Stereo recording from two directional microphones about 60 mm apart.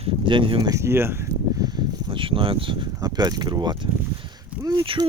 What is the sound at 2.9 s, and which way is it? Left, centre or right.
Speech, right.